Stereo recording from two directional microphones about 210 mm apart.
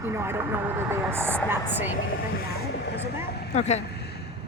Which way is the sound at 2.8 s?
55° left (ahead or behind).